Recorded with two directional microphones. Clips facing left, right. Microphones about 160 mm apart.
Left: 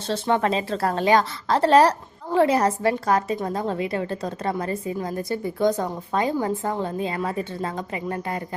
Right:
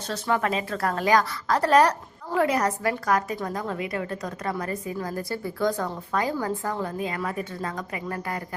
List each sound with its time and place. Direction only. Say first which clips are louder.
0.1 s a woman's voice: left 4 dB; 25° left (ahead or behind)